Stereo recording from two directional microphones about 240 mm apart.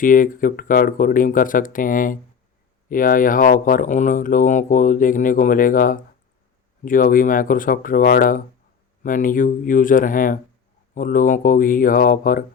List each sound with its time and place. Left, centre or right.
0.0 s speech: left